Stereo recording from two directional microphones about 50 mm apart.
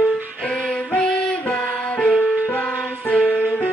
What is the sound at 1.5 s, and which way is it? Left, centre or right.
Music, left.